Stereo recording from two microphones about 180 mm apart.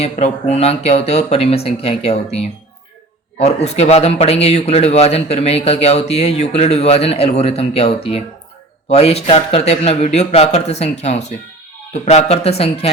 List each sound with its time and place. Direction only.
0.0 s a man's voice: 35° left (ahead or behind)